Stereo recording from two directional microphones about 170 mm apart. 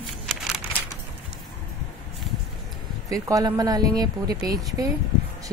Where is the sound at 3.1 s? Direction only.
20° right (ahead or behind).